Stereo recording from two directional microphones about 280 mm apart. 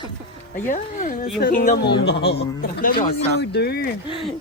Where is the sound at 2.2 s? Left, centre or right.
Left.